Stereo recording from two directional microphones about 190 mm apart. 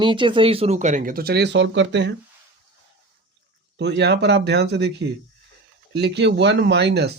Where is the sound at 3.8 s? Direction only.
60° right (ahead or behind).